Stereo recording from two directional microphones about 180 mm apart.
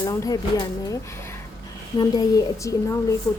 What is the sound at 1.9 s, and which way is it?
Speech, 20° left (ahead or behind).